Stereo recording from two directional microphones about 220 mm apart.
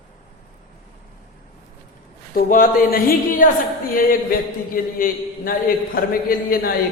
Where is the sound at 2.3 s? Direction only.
40° left (ahead or behind).